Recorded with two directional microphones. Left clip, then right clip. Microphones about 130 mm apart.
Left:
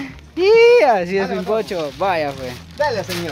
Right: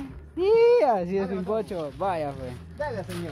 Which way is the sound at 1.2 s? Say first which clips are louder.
Left 9 dB; 5° right (ahead or behind).